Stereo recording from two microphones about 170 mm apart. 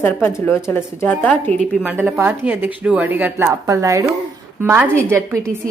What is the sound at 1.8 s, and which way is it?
A woman's voice, 5° right (ahead or behind).